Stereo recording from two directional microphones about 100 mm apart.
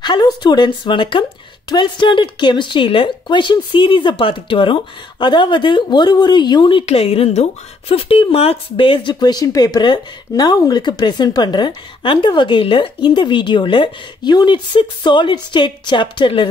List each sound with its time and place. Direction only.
0.0 s speech: 45° left (ahead or behind)
6.9 s speech: 85° left
7.9 s speech: 70° left (ahead or behind)
9.2 s speech: 40° left (ahead or behind); by 16.4 s 55° left (ahead or behind)